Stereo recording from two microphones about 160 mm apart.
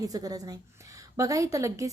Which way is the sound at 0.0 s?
25° right (ahead or behind).